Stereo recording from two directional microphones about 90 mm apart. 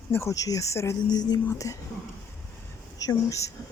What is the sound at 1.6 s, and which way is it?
Speech, 35° left (ahead or behind).